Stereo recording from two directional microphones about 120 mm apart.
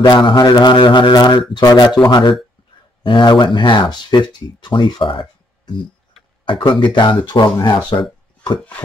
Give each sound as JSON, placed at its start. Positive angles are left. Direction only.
{"t": 0.0, "sound": "speech", "side_deg": 40}
{"t": 3.0, "sound": "speech", "side_deg": 40}
{"t": 6.4, "sound": "speech", "side_deg": 45}